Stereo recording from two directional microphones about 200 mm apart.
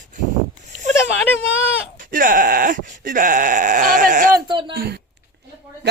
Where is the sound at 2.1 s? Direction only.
45° right (ahead or behind).